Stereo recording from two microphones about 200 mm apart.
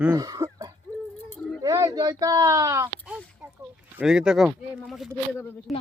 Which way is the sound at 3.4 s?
5° right (ahead or behind).